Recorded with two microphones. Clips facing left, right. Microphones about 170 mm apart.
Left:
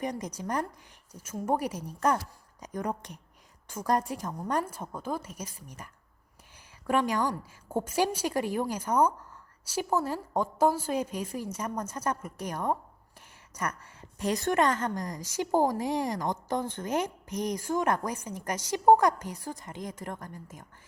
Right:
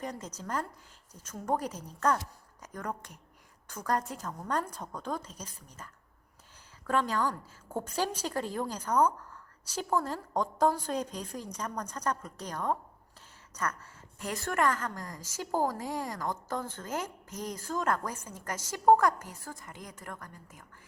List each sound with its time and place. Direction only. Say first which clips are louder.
0.0 s a woman's voice: left 5 dB; 15° left (ahead or behind)